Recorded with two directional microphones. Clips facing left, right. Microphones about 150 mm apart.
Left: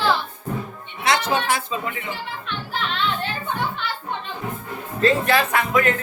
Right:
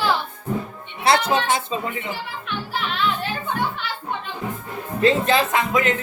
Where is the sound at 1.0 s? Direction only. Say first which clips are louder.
Right 2 dB; 30° right (ahead or behind).